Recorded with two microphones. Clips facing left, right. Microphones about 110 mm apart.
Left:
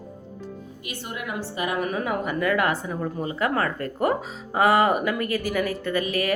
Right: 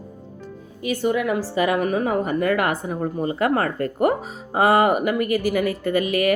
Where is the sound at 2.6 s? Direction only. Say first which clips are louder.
Right 2 dB; 50° right (ahead or behind).